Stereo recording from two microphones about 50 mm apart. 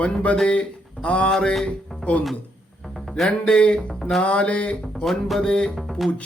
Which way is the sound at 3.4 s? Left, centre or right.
Left.